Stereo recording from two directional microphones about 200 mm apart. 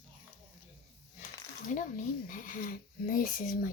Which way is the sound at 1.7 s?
40° left (ahead or behind).